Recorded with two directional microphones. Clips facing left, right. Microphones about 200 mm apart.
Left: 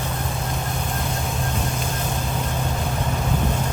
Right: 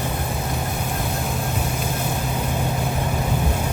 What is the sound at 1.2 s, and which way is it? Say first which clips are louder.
Vehicle: right 1 dB; 5° right (ahead or behind).